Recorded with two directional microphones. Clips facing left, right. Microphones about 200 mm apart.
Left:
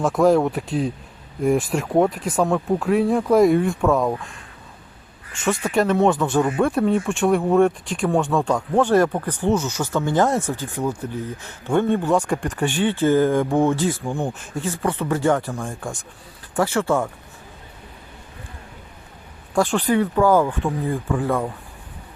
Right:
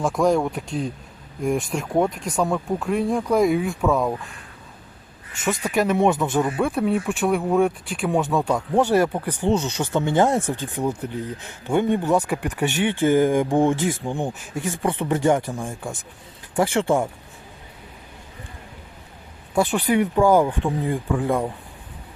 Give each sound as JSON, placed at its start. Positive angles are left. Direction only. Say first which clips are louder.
{"t": 0.0, "sound": "speech", "louder": "left 3 dB", "side_deg": 5}
{"t": 5.3, "sound": "a woman's voice", "louder": "left 2 dB", "side_deg": -20}
{"t": 5.6, "sound": "speech", "louder": "left 1 dB", "side_deg": -5}
{"t": 6.6, "sound": "speech", "louder": "left 3 dB", "side_deg": 0}
{"t": 9.6, "sound": "speech", "louder": "even", "side_deg": -30}
{"t": 9.8, "sound": "speech", "louder": "right 1 dB", "side_deg": -20}
{"t": 14.8, "sound": "speech", "louder": "even", "side_deg": -25}
{"t": 16.7, "sound": "speech", "louder": "even", "side_deg": -25}
{"t": 19.5, "sound": "speech", "louder": "left 1 dB", "side_deg": -10}